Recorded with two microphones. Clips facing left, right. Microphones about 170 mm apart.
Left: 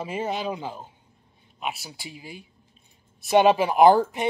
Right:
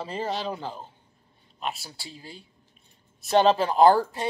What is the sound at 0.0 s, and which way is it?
Speech, 10° left (ahead or behind).